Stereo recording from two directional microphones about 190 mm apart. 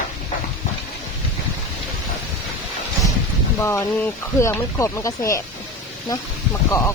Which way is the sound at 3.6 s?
15° left (ahead or behind).